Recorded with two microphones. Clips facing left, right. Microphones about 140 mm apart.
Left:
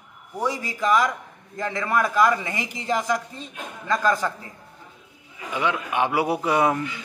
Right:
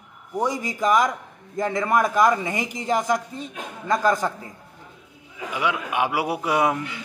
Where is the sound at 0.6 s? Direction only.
15° right (ahead or behind).